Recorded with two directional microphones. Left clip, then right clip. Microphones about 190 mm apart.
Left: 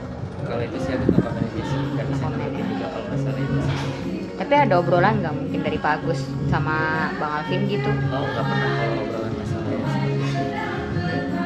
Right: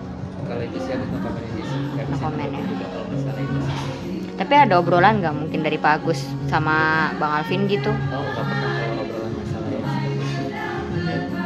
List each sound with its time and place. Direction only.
4.5 s a woman's voice: 45° right (ahead or behind)